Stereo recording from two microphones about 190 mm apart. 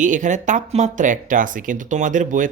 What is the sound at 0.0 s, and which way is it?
Speech, 40° right (ahead or behind).